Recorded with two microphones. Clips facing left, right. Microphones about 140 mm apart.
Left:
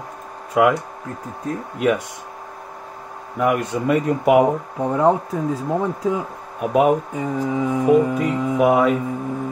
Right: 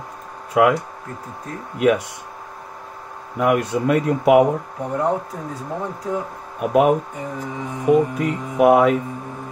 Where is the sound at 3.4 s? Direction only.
5° right (ahead or behind).